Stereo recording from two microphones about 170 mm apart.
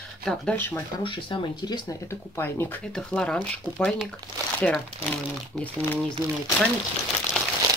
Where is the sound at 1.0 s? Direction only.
30° left (ahead or behind).